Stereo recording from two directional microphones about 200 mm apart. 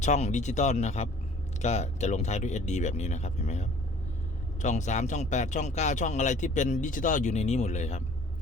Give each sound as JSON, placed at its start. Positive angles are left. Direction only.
{"t": 0.0, "sound": "speech", "side_deg": 35}